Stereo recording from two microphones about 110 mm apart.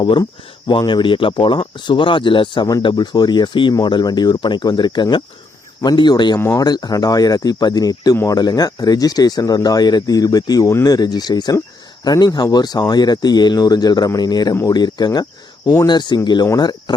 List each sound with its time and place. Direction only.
0.7 s speech: 45° left (ahead or behind)